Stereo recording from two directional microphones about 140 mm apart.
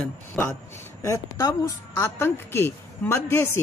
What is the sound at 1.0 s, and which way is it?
A woman's voice, 25° left (ahead or behind).